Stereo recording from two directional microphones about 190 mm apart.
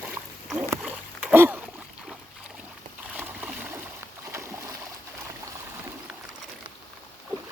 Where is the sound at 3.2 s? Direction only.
10° right (ahead or behind).